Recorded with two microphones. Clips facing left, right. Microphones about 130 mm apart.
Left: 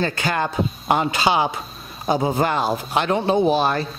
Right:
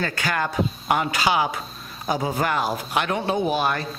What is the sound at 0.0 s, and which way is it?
A man's voice, 25° left (ahead or behind).